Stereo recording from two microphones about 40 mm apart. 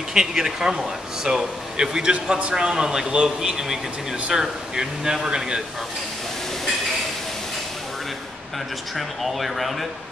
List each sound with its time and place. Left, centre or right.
0.1 s a man's voice: centre
8.9 s speech: centre